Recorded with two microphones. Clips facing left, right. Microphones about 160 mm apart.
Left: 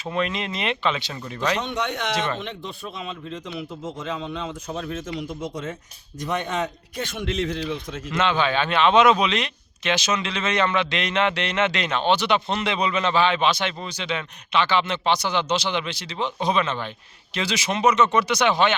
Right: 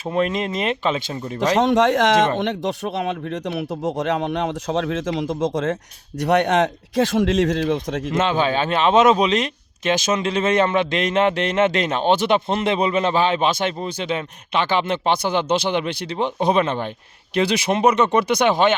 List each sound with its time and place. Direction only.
0.1 s a man's voice: 40° right (ahead or behind)
1.1 s speech: 30° right (ahead or behind)
1.5 s speech: 90° right
2.4 s speech: 80° right
6.1 s a man's voice: 70° right (ahead or behind); by 8.1 s 90° right
8.1 s a man's voice: 40° right (ahead or behind)